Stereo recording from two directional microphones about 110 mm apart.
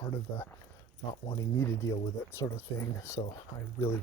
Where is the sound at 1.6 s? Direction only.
25° left (ahead or behind).